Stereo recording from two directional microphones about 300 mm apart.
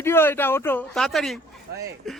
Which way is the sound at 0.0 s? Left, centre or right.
Centre.